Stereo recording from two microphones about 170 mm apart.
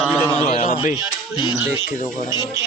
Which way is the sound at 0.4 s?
40° left (ahead or behind).